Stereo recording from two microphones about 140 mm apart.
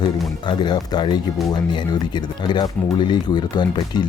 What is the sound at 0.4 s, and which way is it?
Speech, 30° left (ahead or behind).